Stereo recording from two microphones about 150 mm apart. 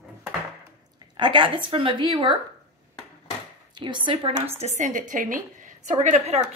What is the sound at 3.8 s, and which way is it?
Speech, 30° right (ahead or behind).